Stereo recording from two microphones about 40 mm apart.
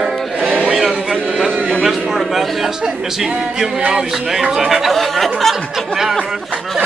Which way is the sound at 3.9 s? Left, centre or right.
Centre.